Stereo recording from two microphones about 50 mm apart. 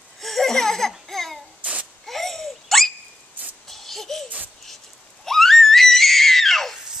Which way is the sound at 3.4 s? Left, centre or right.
Right.